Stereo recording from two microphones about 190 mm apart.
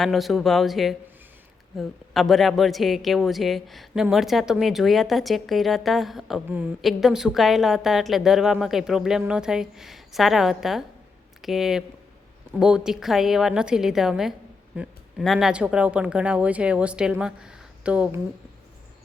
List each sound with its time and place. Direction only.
0.0 s a woman's voice: centre (ahead or behind)